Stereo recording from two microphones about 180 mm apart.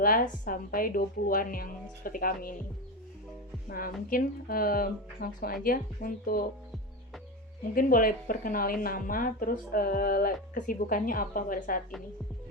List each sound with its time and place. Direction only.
0.0 s speech: 50° left (ahead or behind)
3.7 s speech: 55° left (ahead or behind)
7.8 s speech: 50° left (ahead or behind)